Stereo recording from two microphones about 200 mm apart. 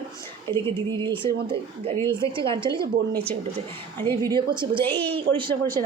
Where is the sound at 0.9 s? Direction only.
25° right (ahead or behind).